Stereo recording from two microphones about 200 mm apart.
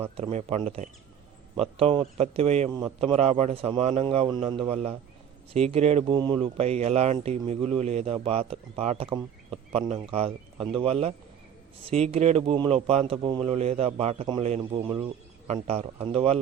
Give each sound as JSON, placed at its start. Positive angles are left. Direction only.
{"t": 0.0, "sound": "speech", "side_deg": -30}